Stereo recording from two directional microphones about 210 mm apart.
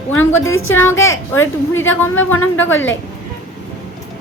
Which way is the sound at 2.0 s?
10° left (ahead or behind).